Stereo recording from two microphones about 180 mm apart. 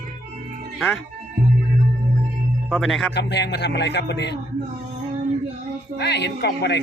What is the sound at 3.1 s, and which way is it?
Speech, 70° left (ahead or behind).